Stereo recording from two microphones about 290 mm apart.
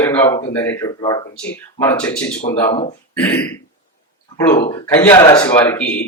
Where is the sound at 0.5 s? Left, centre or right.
Centre.